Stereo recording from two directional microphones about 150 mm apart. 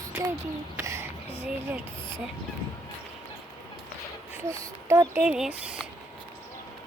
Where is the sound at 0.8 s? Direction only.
20° right (ahead or behind).